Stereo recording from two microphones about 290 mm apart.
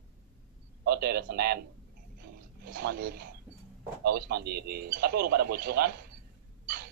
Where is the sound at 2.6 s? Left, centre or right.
Right.